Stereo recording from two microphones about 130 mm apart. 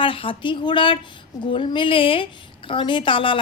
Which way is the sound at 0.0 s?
40° left (ahead or behind).